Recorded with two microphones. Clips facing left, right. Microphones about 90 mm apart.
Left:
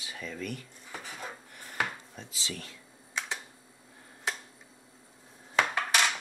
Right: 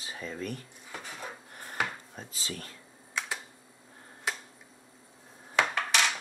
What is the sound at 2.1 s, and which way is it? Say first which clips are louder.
Speech: even; 45° right (ahead or behind).